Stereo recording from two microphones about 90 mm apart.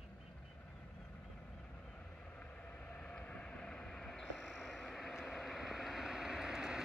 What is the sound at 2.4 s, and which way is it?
Train, 15° left (ahead or behind).